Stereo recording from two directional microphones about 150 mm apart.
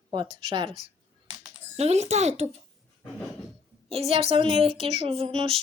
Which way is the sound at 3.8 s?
40° right (ahead or behind).